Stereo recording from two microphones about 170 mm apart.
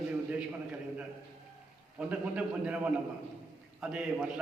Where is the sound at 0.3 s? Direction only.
5° right (ahead or behind).